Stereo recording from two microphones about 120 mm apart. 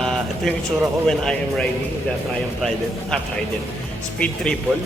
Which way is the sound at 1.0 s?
5° left (ahead or behind).